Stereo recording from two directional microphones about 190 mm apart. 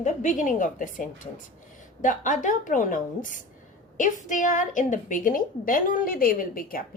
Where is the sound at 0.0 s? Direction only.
40° left (ahead or behind).